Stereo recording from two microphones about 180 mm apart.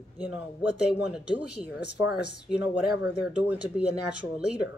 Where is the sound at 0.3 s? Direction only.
5° right (ahead or behind).